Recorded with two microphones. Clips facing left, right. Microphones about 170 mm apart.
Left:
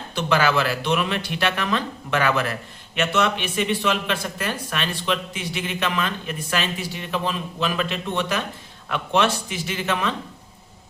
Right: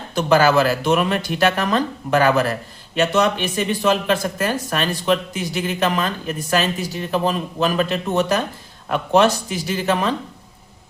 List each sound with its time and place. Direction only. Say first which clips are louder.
0.1 s speech: right 6 dB; 40° right (ahead or behind)